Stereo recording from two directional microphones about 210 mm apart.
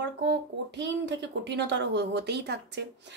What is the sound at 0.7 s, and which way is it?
A woman's voice, 55° right (ahead or behind).